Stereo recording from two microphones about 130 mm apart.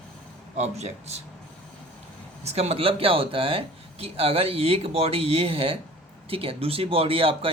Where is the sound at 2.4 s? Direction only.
55° right (ahead or behind).